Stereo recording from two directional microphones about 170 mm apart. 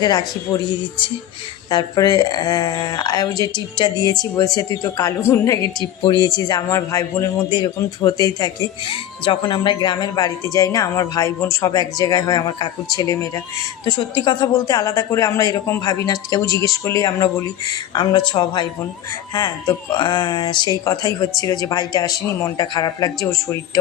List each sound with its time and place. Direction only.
0.0 s a man's voice: 25° left (ahead or behind)